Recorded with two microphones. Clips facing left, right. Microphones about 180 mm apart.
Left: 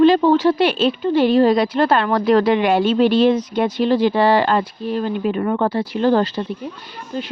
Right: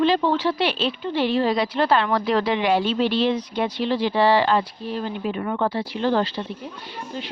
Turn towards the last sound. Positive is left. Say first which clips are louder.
# left 4 dB
turn(degrees=45)  # may be behind; listen again after turning